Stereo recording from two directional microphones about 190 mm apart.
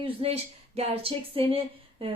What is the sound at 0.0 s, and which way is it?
Speech, 30° right (ahead or behind).